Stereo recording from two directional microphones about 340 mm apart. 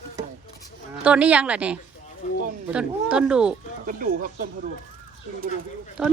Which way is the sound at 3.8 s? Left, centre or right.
Right.